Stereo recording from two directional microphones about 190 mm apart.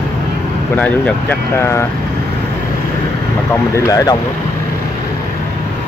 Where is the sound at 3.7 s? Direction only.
15° left (ahead or behind).